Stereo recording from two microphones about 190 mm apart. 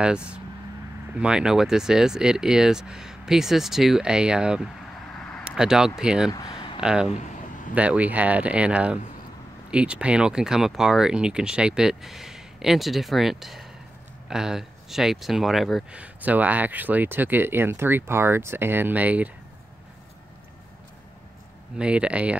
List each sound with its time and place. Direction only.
0.0 s speech: 5° right (ahead or behind)
6.3 s a sound: 20° left (ahead or behind)
6.8 s speech: 5° right (ahead or behind)
21.7 s speech: 5° right (ahead or behind)